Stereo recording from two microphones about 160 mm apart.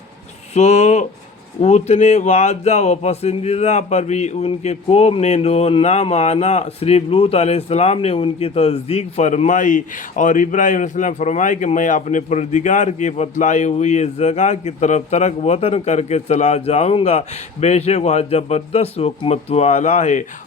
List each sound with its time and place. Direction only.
0.5 s speech: 45° left (ahead or behind)